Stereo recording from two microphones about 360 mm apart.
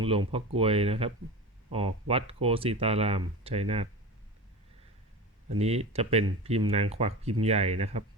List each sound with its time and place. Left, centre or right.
0.0 s speech: centre
5.5 s speech: centre